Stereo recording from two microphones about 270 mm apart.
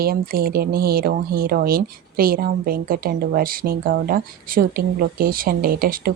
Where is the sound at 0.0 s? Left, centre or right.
Right.